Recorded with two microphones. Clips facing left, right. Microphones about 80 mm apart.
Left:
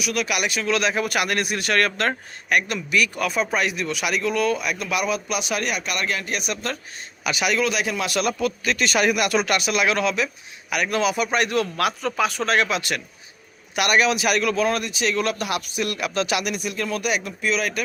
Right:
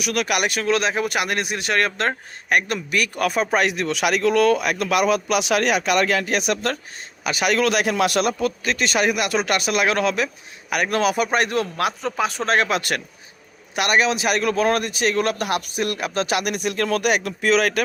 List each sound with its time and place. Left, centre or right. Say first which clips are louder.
0.0 s speech: right 2 dB; right
7.3 s a man's voice: right 2 dB; right
7.5 s speech: right 6 dB; right
8.4 s a man's voice: right 1 dB; right
13.7 s a man's voice: even; right
14.5 s speech: right 2 dB; right
16.5 s speech: right 4 dB; right